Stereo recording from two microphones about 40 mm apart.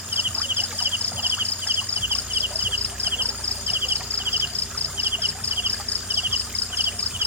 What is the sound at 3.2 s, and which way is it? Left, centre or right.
Cricket, right.